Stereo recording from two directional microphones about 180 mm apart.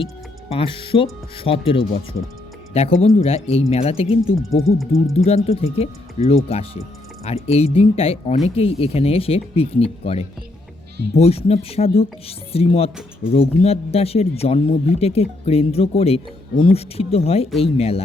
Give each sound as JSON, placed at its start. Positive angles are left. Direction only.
{"t": 0.5, "sound": "speech", "side_deg": 30}